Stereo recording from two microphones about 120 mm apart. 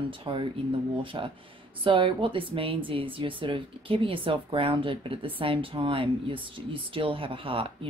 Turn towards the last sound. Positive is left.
turn(degrees=-50)  # may be behind; listen again after turning